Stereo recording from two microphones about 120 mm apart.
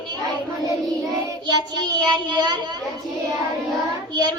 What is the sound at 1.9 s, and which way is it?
Speech, 35° right (ahead or behind).